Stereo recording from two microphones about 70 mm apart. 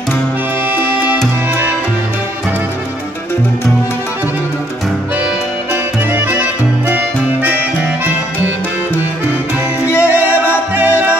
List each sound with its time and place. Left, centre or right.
0.7 s music: right
6.1 s music: right
10.0 s music: right